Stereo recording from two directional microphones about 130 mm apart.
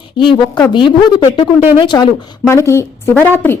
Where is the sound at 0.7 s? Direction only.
40° left (ahead or behind).